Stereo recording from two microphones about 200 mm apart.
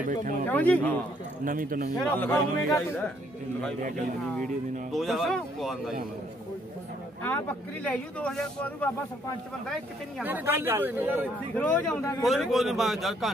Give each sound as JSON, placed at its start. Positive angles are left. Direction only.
{"t": 0.2, "sound": "speech", "side_deg": -40}
{"t": 0.5, "sound": "speech", "side_deg": 10}
{"t": 1.4, "sound": "a man's voice", "side_deg": -45}
{"t": 2.1, "sound": "speech", "side_deg": 10}
{"t": 4.9, "sound": "speech", "side_deg": 0}
{"t": 7.2, "sound": "speech", "side_deg": 5}
{"t": 10.2, "sound": "speech", "side_deg": -10}
{"t": 11.5, "sound": "speech", "side_deg": 5}